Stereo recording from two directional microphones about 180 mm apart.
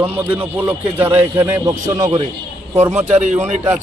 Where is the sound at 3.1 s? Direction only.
40° right (ahead or behind).